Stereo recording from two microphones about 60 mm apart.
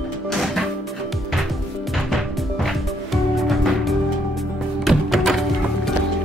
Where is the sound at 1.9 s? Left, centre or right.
Centre.